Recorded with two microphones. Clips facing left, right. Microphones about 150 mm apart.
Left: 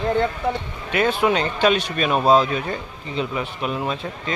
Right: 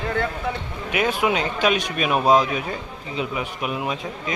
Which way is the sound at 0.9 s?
10° right (ahead or behind).